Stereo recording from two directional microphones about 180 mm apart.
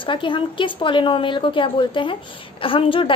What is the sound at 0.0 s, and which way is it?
A woman's voice, 25° left (ahead or behind).